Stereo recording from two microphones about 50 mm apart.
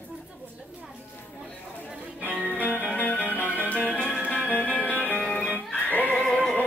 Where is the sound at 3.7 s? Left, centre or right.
Left.